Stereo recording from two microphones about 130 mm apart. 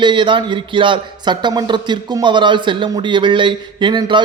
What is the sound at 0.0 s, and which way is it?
A man's voice, 35° right (ahead or behind).